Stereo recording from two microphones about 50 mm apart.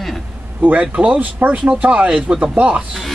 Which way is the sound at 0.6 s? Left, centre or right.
Right.